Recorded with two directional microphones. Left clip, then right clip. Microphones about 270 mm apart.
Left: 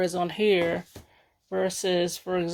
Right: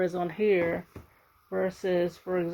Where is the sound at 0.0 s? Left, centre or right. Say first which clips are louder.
Left 2 dB; left.